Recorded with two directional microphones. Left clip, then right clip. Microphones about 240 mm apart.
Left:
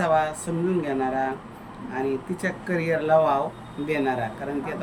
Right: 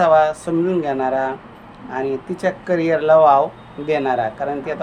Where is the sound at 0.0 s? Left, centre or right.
Centre.